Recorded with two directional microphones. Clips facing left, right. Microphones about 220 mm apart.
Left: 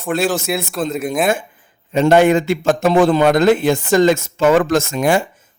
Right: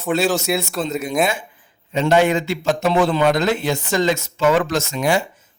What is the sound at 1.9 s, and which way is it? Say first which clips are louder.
A man's voice: left 4 dB; 50° left (ahead or behind).